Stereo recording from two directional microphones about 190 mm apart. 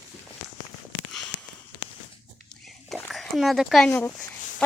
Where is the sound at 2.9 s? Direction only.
Centre (ahead or behind).